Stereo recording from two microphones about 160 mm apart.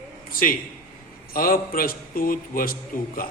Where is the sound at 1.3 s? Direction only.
60° left (ahead or behind).